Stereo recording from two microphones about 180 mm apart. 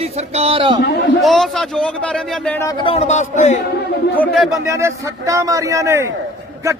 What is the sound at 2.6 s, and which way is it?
Speech, 30° left (ahead or behind).